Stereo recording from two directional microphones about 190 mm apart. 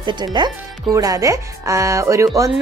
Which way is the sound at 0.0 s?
25° right (ahead or behind).